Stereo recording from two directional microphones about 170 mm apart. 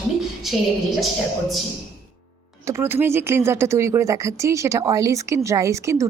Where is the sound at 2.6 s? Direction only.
15° right (ahead or behind).